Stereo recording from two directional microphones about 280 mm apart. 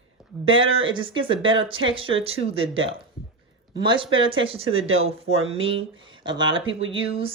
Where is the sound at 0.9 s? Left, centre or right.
Centre.